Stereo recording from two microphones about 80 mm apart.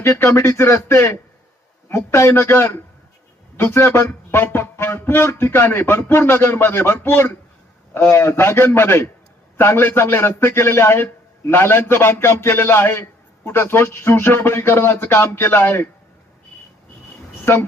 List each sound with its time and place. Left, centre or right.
0.0 s a man's voice: left
17.4 s speech: left